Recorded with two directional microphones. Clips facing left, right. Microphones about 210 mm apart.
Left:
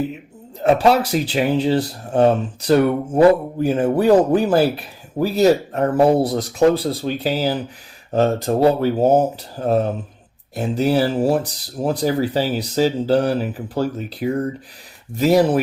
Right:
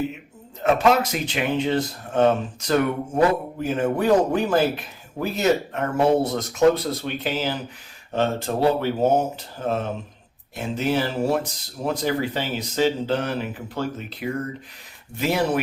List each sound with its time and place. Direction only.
0.6 s a man's voice: 35° left (ahead or behind)